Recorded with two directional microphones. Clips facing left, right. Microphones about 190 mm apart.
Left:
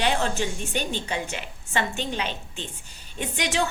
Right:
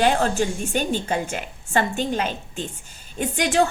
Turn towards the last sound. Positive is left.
turn(degrees=-45)  # may be behind; listen again after turning